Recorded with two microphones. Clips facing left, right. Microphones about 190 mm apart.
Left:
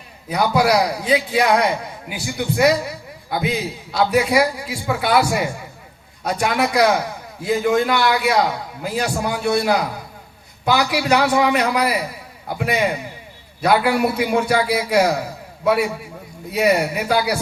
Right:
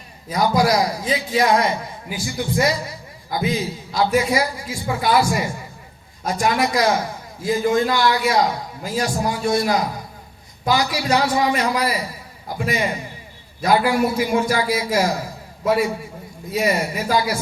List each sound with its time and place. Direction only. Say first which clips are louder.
0.3 s a man's voice: left 1 dB; 65° left (ahead or behind)
16.5 s a man's voice: left 3 dB; 65° left (ahead or behind)